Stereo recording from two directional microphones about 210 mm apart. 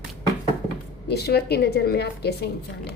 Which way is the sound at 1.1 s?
50° left (ahead or behind).